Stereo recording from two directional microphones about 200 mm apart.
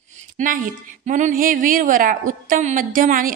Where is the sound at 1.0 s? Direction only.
40° right (ahead or behind).